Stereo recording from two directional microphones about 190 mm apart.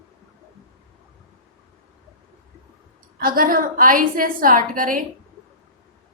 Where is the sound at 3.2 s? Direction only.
50° right (ahead or behind).